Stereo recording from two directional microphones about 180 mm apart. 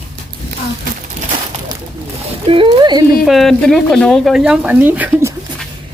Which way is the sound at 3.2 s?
Centre (ahead or behind).